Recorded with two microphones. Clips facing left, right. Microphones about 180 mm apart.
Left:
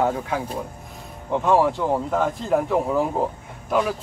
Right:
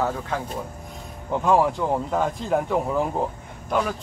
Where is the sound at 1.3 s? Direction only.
Centre (ahead or behind).